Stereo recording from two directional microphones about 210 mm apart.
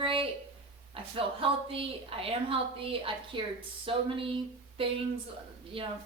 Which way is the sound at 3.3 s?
25° right (ahead or behind).